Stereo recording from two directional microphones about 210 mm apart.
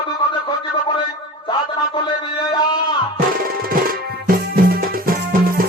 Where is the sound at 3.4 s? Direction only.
45° right (ahead or behind).